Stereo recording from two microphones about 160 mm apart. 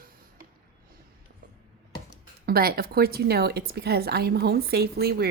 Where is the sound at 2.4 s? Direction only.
70° right (ahead or behind).